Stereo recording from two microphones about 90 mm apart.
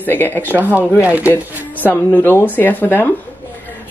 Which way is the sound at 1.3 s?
25° left (ahead or behind).